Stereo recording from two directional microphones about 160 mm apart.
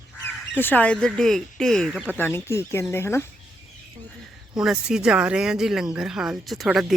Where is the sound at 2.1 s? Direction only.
15° left (ahead or behind).